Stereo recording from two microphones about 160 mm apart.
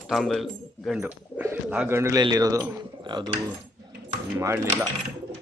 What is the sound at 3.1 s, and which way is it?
Cutlery, 30° right (ahead or behind).